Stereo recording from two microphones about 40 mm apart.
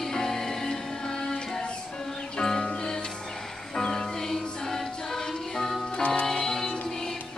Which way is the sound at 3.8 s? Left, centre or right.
Centre.